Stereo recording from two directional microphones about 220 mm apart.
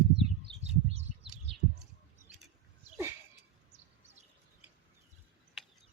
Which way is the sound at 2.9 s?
10° right (ahead or behind).